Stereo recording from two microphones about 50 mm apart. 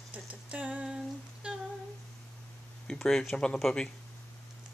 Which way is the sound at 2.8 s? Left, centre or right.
Centre.